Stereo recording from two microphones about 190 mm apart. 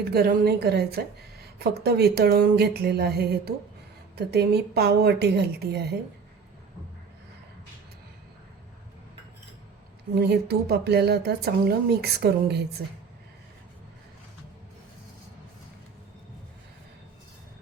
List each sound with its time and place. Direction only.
0.0 s speech: 55° right (ahead or behind)
10.2 s speech: 55° right (ahead or behind)